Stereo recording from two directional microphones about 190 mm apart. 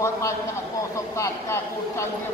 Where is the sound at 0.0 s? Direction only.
15° left (ahead or behind).